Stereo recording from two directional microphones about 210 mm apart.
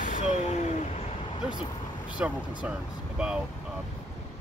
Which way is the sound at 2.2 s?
10° right (ahead or behind).